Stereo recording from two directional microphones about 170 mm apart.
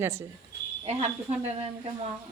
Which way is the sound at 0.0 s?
15° right (ahead or behind).